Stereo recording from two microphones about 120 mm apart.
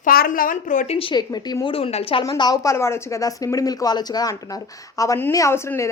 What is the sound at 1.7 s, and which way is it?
Speech, 55° left (ahead or behind).